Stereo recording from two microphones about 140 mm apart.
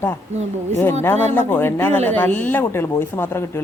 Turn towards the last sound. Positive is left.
turn(degrees=15)  # may be behind; listen again after turning